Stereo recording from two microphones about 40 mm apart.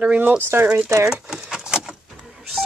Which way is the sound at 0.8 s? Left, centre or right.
Centre.